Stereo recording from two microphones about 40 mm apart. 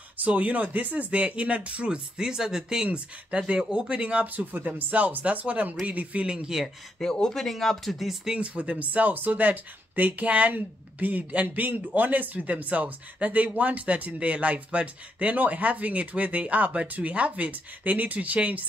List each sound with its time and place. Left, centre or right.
0.2 s speech: right; by 2.9 s centre
2.9 s speech: right
4.5 s speech: right
4.9 s speech: right
6.3 s speech: right
7.0 s speech: centre
8.4 s speech: right